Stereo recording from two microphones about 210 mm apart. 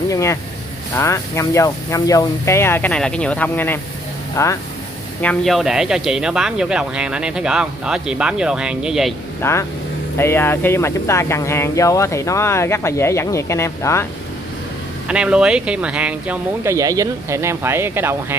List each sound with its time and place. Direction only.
0.1 s speech: 15° left (ahead or behind)
5.2 s speech: 5° left (ahead or behind)
9.4 s speech: 15° left (ahead or behind)
15.0 s speech: 5° right (ahead or behind)